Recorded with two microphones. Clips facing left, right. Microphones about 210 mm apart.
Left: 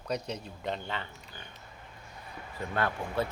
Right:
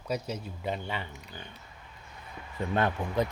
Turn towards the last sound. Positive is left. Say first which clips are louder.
# right 3 dB
turn(degrees=-20)  # may be behind; listen again after turning